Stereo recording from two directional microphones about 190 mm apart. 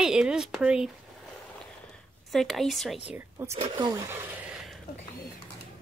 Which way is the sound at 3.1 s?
10° right (ahead or behind).